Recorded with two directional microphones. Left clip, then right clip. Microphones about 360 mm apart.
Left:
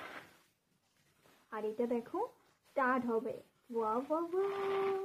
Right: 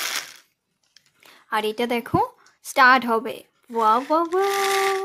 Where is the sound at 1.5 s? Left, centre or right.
Right.